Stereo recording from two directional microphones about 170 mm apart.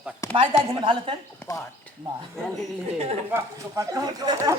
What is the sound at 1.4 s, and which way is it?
Speech, 10° left (ahead or behind).